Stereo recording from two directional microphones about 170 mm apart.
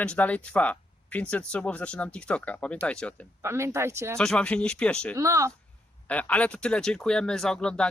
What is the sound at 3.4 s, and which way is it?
Speech, 15° right (ahead or behind).